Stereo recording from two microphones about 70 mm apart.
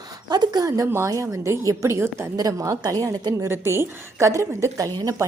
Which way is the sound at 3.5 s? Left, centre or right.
Right.